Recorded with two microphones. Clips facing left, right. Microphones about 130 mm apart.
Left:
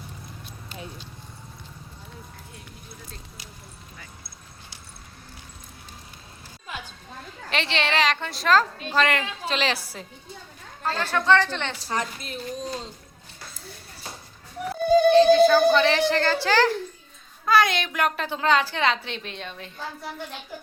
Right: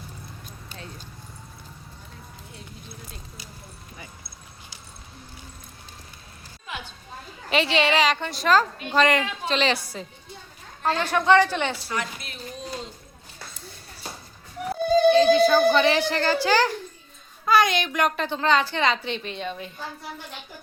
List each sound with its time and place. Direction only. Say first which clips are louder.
7.5 s a woman's voice: right 4 dB; 5° right (ahead or behind)
10.8 s speech: right 2 dB; 15° right (ahead or behind)
11.8 s a woman's voice: left 2 dB; 40° left (ahead or behind)
15.1 s a woman's voice: left 4 dB; 5° right (ahead or behind)